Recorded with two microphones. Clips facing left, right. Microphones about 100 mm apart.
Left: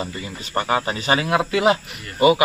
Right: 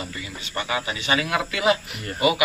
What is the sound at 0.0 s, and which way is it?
A man's voice, 40° left (ahead or behind).